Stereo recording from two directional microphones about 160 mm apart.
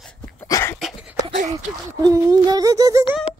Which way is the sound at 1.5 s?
20° right (ahead or behind).